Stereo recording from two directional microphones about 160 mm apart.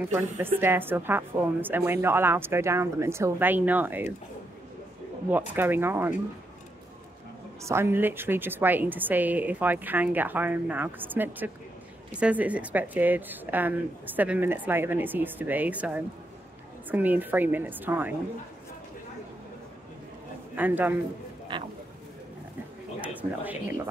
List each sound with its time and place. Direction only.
0.0 s speech: 15° right (ahead or behind)
5.5 s speech: 15° right (ahead or behind)
7.6 s speech: 15° right (ahead or behind)
20.5 s speech: 10° right (ahead or behind)
21.5 s speech: 30° right (ahead or behind)
22.9 s a sound: 10° right (ahead or behind)